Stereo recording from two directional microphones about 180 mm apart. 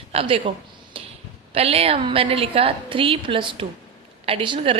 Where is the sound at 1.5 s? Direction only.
35° right (ahead or behind).